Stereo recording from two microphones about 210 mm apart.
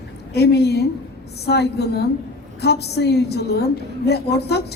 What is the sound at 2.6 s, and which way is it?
A woman's voice, 50° left (ahead or behind).